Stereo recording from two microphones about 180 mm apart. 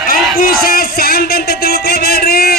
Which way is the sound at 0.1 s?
55° left (ahead or behind).